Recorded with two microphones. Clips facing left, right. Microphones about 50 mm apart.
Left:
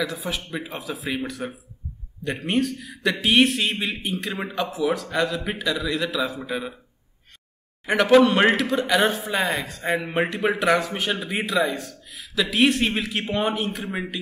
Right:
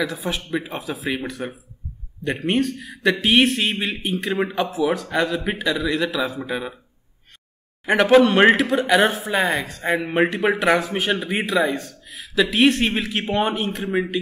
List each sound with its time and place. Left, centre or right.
0.0 s a man's voice: centre
3.2 s a man's voice: centre
7.8 s a man's voice: centre